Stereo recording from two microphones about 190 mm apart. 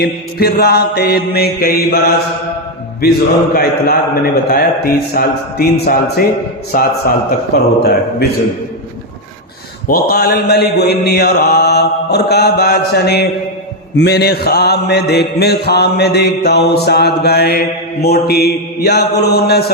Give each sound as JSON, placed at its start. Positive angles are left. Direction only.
{"t": 0.0, "sound": "mantra", "side_deg": 55}
{"t": 3.0, "sound": "mantra", "side_deg": 55}
{"t": 9.8, "sound": "mantra", "side_deg": 50}